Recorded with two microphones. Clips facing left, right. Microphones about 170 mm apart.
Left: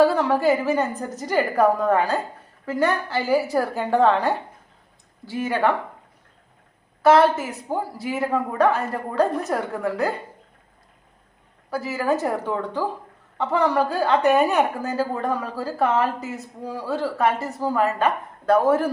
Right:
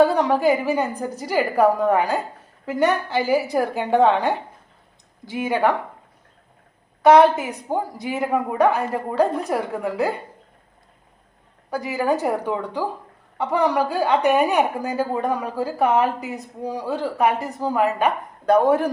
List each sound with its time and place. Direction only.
0.0 s a woman's voice: 15° right (ahead or behind)
7.0 s a woman's voice: 20° right (ahead or behind)
11.7 s a woman's voice: 15° right (ahead or behind)